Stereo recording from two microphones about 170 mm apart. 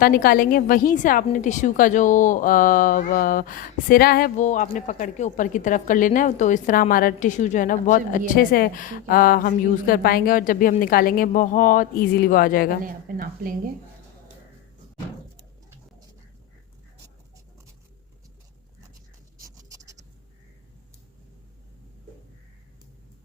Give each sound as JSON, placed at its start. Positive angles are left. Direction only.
{"t": 0.0, "sound": "a woman's voice", "side_deg": 60}
{"t": 4.4, "sound": "a woman's voice", "side_deg": 50}
{"t": 12.8, "sound": "speech", "side_deg": -55}
{"t": 19.4, "sound": "a sound", "side_deg": -20}